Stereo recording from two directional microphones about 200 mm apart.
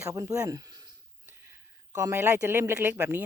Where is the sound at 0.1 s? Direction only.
15° right (ahead or behind).